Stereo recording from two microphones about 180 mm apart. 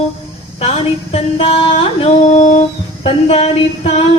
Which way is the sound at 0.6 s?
35° left (ahead or behind).